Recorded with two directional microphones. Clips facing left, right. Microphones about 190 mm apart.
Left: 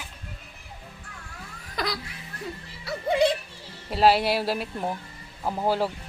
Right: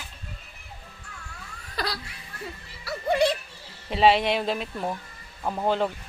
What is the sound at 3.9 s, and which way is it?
A woman's voice, centre (ahead or behind).